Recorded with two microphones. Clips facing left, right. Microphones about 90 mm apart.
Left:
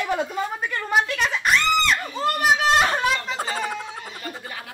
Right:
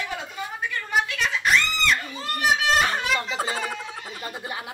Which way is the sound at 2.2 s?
40° left (ahead or behind).